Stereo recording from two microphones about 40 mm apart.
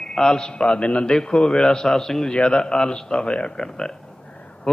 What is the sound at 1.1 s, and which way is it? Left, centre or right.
A man's voice, centre.